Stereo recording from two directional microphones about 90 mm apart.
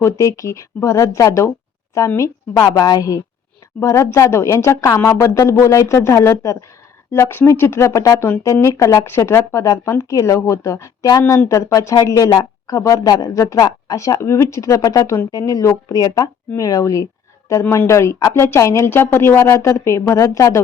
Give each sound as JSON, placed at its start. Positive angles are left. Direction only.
{"t": 0.0, "sound": "speech", "side_deg": 35}
{"t": 2.6, "sound": "a woman's voice", "side_deg": 50}